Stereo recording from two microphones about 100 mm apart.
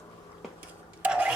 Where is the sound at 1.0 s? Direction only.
10° right (ahead or behind).